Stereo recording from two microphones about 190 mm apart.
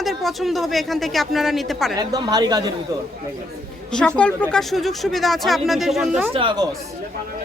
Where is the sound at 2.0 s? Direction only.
20° right (ahead or behind).